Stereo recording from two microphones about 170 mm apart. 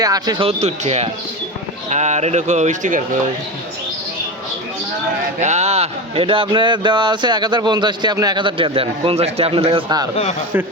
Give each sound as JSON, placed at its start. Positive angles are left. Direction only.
{"t": 0.0, "sound": "speech", "side_deg": -20}
{"t": 0.4, "sound": "speech", "side_deg": -40}
{"t": 5.4, "sound": "speech", "side_deg": -40}